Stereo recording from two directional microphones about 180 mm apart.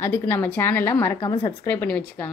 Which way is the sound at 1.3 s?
30° left (ahead or behind).